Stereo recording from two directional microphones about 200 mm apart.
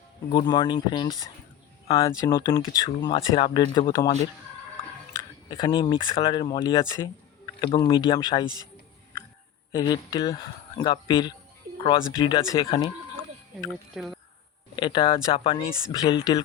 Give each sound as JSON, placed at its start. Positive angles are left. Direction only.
{"t": 0.3, "sound": "speech", "side_deg": 20}
{"t": 5.5, "sound": "speech", "side_deg": 20}
{"t": 9.7, "sound": "speech", "side_deg": 20}
{"t": 13.9, "sound": "speech", "side_deg": 0}
{"t": 14.8, "sound": "speech", "side_deg": 25}